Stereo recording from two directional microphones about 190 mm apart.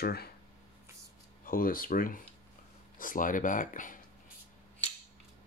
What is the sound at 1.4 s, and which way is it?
Speech, 50° left (ahead or behind).